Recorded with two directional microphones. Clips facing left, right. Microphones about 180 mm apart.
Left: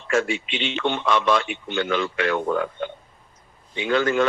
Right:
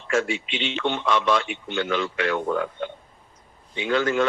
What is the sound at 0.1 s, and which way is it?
Speech, 55° left (ahead or behind).